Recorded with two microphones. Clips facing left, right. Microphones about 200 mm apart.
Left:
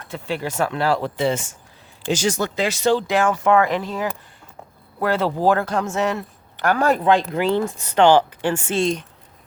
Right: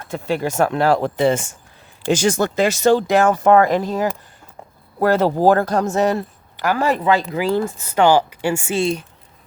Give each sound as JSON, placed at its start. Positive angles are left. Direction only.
{"t": 0.1, "sound": "a man's voice", "side_deg": -45}
{"t": 6.6, "sound": "speech", "side_deg": -5}